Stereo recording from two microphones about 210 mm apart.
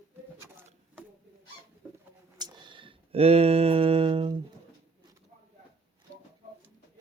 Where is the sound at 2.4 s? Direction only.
20° right (ahead or behind).